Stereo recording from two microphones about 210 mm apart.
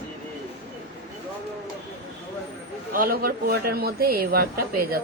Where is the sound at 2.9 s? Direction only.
45° right (ahead or behind).